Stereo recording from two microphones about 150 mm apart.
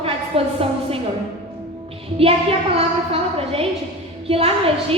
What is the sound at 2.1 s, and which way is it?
A woman's voice, 40° right (ahead or behind).